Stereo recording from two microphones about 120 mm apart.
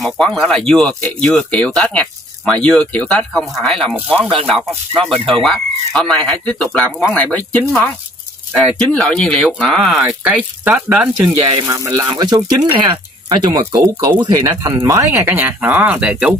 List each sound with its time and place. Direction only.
0.0 s speech: centre (ahead or behind)
8.9 s speech: 5° left (ahead or behind); by 11.3 s 10° right (ahead or behind)
11.6 s speech: 30° right (ahead or behind)
15.2 s speech: 15° right (ahead or behind)